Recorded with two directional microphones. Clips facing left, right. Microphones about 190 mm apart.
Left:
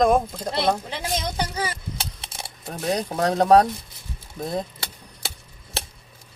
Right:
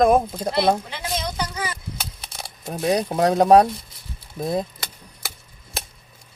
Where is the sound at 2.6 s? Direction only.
15° right (ahead or behind).